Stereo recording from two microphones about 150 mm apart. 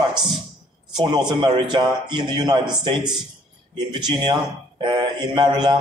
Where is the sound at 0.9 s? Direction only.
30° right (ahead or behind).